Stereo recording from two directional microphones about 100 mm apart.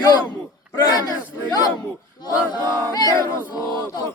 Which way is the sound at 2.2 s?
45° left (ahead or behind).